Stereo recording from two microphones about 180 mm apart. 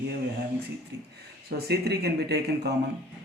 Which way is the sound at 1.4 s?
65° right (ahead or behind).